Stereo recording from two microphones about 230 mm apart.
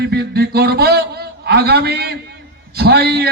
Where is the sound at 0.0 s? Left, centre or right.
Right.